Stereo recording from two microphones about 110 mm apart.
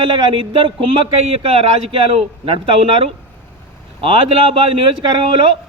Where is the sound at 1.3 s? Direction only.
65° right (ahead or behind).